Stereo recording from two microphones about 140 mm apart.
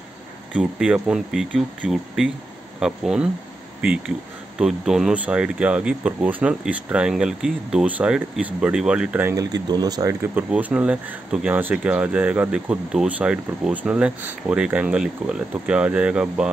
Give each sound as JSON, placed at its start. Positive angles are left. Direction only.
{"t": 0.5, "sound": "speech", "side_deg": -5}
{"t": 4.6, "sound": "speech", "side_deg": -5}
{"t": 9.3, "sound": "speech", "side_deg": -25}
{"t": 10.2, "sound": "speech", "side_deg": -10}